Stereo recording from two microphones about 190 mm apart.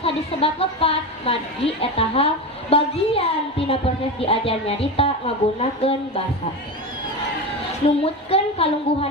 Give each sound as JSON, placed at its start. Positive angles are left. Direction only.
{"t": 0.0, "sound": "a woman's voice", "side_deg": 30}
{"t": 7.9, "sound": "a woman's voice", "side_deg": 30}